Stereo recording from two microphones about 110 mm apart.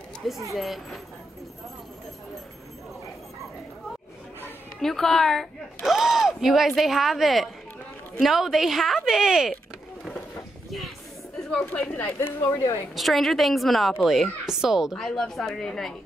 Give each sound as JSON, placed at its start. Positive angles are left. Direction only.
{"t": 0.2, "sound": "a woman's voice", "side_deg": 0}
{"t": 4.7, "sound": "a woman's voice", "side_deg": 5}
{"t": 11.4, "sound": "a woman's voice", "side_deg": 10}
{"t": 12.9, "sound": "a woman's voice", "side_deg": 0}